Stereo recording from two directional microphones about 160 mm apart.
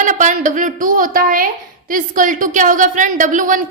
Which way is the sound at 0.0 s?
50° right (ahead or behind).